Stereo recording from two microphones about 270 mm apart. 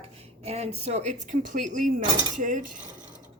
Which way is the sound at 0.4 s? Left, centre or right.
Right.